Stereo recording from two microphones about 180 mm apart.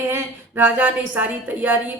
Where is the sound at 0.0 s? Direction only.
15° right (ahead or behind).